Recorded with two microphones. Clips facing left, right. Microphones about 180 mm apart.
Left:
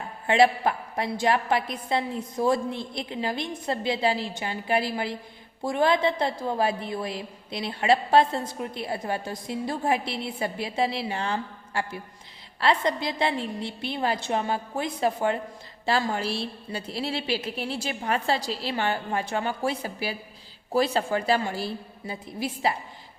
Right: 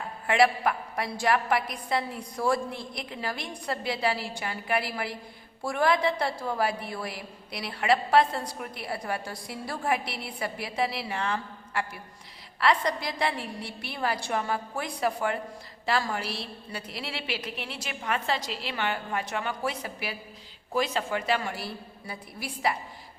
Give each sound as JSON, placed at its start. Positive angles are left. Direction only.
{"t": 0.3, "sound": "a woman's voice", "side_deg": 25}